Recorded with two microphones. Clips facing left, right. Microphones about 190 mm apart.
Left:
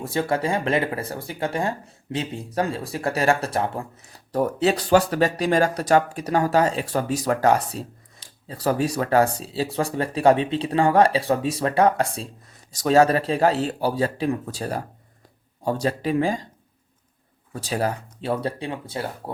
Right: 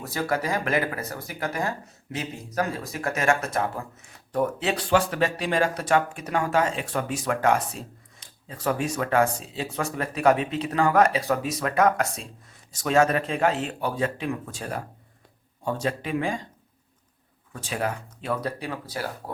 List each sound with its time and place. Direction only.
0.0 s speech: 25° left (ahead or behind)
17.5 s speech: 35° left (ahead or behind)